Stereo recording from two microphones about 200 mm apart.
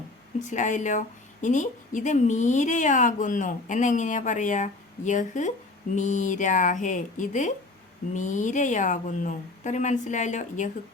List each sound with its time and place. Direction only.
0.3 s speech: 40° left (ahead or behind)